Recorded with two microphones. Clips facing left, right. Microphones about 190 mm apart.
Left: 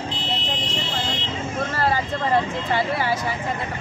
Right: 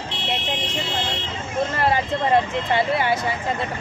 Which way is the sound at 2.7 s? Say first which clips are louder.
Right 3 dB; 25° right (ahead or behind).